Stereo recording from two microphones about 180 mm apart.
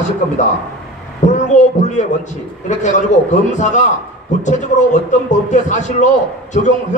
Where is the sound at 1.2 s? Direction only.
40° left (ahead or behind).